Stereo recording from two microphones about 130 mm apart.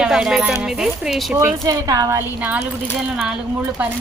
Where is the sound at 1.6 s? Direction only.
25° right (ahead or behind).